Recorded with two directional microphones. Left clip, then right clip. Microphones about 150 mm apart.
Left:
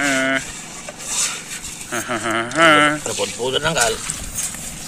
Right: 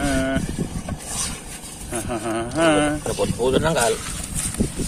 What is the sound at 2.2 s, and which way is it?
Speech, 5° right (ahead or behind).